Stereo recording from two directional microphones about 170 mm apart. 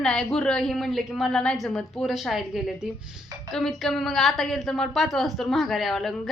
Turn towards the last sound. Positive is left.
turn(degrees=0)  # may be behind; listen again after turning